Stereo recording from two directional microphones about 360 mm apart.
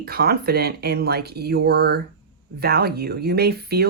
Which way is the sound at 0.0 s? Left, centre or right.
Right.